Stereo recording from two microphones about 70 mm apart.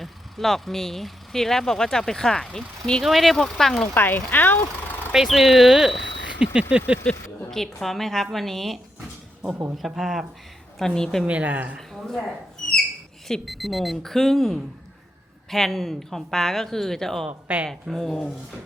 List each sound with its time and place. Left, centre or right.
0.0 s speech: centre
3.0 s a woman's voice: centre
3.9 s speech: left
5.1 s a woman's voice: centre
6.4 s vehicle: centre
7.0 s a woman's voice: centre
10.8 s speech: centre
11.3 s a woman's voice: centre
11.8 s a woman's voice: centre
17.2 s a woman's voice: right
17.7 s speech: centre